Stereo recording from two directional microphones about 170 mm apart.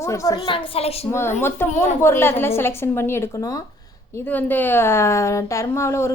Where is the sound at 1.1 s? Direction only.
15° left (ahead or behind).